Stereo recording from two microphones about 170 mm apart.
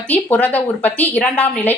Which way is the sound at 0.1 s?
10° left (ahead or behind).